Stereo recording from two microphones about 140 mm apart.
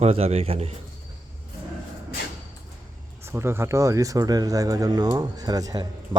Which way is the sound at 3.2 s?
15° right (ahead or behind).